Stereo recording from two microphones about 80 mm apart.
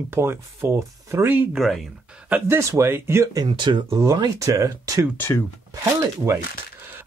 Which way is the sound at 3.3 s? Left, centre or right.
Right.